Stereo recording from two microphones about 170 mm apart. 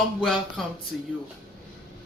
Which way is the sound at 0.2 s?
Centre (ahead or behind).